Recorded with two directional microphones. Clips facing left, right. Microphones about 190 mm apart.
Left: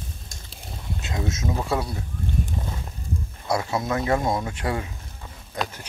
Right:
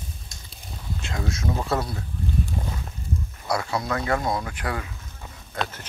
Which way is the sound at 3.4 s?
20° left (ahead or behind).